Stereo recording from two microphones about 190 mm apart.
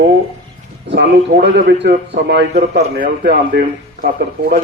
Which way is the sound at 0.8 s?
60° right (ahead or behind).